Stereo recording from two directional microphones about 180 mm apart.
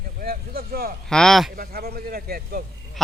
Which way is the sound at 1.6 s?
60° right (ahead or behind).